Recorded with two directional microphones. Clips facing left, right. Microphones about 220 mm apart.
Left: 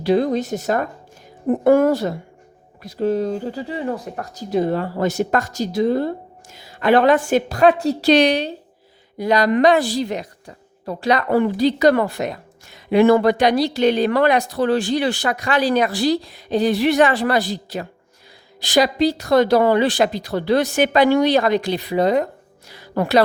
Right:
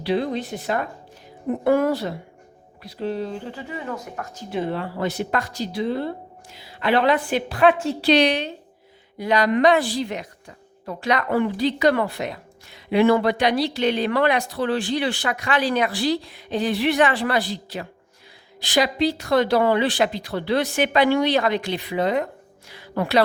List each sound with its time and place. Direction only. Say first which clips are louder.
0.0 s a woman's voice: left 6 dB; 45° left (ahead or behind)